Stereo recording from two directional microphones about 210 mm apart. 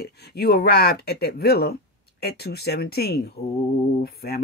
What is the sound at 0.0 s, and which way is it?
Speech, 50° left (ahead or behind).